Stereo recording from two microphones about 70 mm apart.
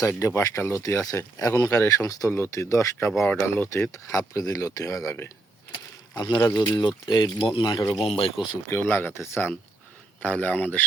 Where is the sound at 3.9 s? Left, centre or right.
Left.